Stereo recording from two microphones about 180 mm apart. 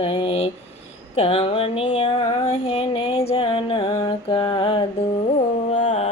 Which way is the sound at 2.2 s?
20° left (ahead or behind).